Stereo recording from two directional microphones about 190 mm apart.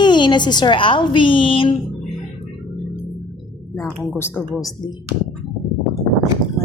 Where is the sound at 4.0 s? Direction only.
10° left (ahead or behind).